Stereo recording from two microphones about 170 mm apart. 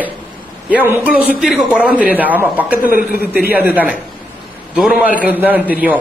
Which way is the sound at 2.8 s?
60° left (ahead or behind).